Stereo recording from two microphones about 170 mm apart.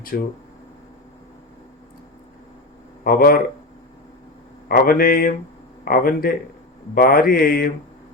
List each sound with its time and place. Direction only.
0.1 s mantra: 60° left (ahead or behind)
3.0 s speech: 60° left (ahead or behind)
4.7 s mantra: 60° left (ahead or behind)